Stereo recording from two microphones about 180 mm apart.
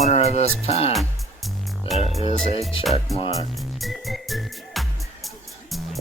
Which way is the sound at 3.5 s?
Centre (ahead or behind).